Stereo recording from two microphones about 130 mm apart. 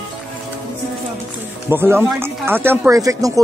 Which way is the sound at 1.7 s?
20° right (ahead or behind).